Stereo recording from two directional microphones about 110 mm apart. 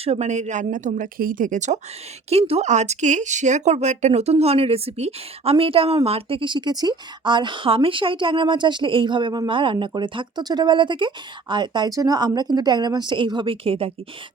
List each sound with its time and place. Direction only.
0.0 s speech: 80° right
1.5 s speech: 90° right; by 13.9 s 60° right (ahead or behind)